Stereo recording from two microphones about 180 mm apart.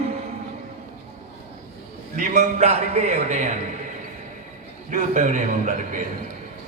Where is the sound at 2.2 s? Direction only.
40° right (ahead or behind).